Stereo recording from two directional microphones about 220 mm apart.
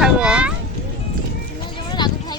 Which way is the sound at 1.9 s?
20° left (ahead or behind).